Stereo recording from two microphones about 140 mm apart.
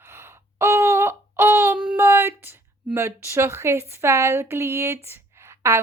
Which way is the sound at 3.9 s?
20° right (ahead or behind).